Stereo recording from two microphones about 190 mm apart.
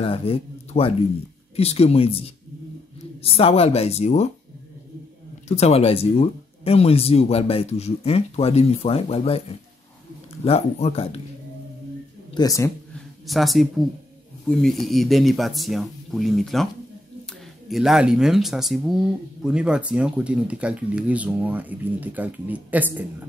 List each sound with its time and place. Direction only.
0.0 s speech: 30° left (ahead or behind)
5.5 s speech: 35° left (ahead or behind)
12.4 s speech: 15° left (ahead or behind)
13.3 s speech: centre (ahead or behind)
17.6 s speech: centre (ahead or behind)